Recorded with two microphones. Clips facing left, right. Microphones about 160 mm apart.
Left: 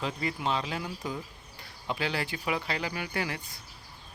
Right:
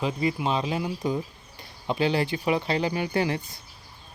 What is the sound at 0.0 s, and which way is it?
Speech, 15° right (ahead or behind).